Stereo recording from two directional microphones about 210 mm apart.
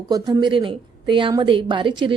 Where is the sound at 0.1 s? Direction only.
20° right (ahead or behind).